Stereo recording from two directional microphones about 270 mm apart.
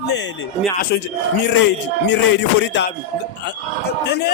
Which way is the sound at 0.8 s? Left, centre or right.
Left.